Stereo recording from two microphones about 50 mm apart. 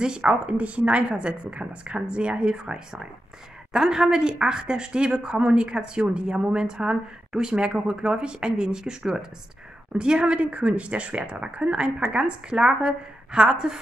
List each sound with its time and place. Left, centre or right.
0.0 s speech: right